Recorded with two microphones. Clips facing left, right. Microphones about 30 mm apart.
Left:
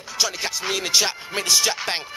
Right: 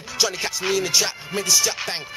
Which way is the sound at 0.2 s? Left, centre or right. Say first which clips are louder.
Right 1 dB; centre.